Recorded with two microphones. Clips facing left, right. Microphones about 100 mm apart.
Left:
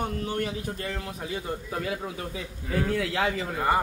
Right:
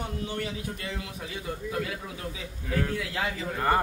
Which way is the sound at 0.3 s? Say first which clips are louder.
Left 3 dB; 50° left (ahead or behind).